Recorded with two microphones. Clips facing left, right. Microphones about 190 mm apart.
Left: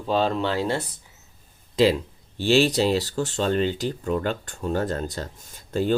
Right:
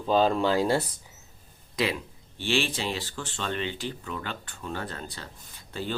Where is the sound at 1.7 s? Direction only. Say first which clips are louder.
Left 9 dB; 30° left (ahead or behind).